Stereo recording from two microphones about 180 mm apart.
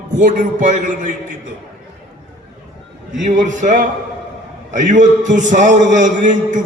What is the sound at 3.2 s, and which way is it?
A man's voice, 45° right (ahead or behind).